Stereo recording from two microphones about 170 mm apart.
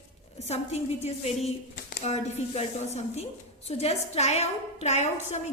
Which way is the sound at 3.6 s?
40° left (ahead or behind).